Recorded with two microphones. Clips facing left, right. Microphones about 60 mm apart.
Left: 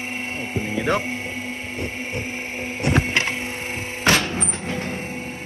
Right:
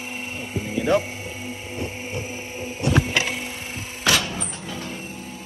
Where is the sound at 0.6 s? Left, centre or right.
Left.